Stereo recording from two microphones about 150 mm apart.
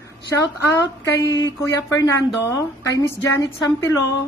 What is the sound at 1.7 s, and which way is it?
Speech, 20° left (ahead or behind).